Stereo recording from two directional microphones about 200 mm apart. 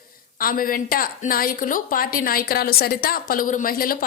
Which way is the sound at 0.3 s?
45° left (ahead or behind).